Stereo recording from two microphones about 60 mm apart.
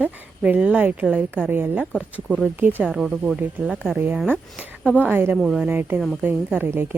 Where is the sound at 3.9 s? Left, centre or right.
Right.